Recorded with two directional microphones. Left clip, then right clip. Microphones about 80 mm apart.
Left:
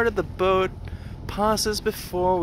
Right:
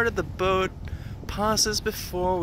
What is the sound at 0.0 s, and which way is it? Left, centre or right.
Speech, left.